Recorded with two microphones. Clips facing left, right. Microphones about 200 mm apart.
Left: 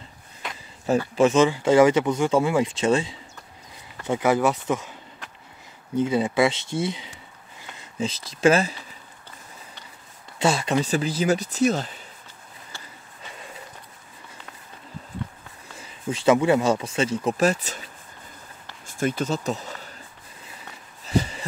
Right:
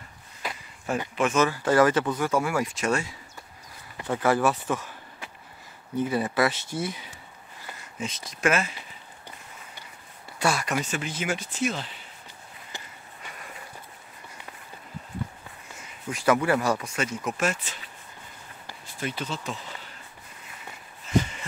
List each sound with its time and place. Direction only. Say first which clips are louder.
1.1 s speech: left 5 dB; 25° left (ahead or behind)
5.9 s speech: left 4 dB; 20° left (ahead or behind)
10.4 s speech: left 4 dB; 25° left (ahead or behind)
12.7 s skateboard: right 2 dB; 15° right (ahead or behind)
15.8 s a sound: left 5 dB; 30° left (ahead or behind)
16.3 s speech: left 5 dB; 20° left (ahead or behind); by 17.8 s 40° left (ahead or behind)
18.9 s speech: left 8 dB; 45° left (ahead or behind)
21.0 s a sound: left 1 dB; 35° left (ahead or behind)